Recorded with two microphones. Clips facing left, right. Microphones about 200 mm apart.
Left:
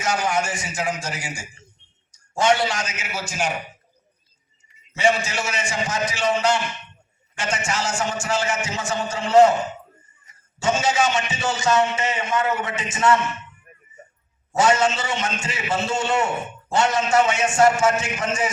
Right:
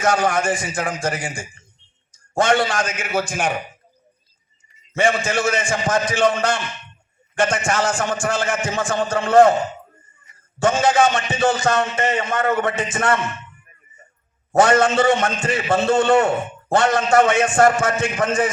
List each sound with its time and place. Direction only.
0.0 s a man's voice: 55° right (ahead or behind)
4.9 s a man's voice: 50° right (ahead or behind)
10.6 s a man's voice: 55° right (ahead or behind)
14.5 s a man's voice: 55° right (ahead or behind)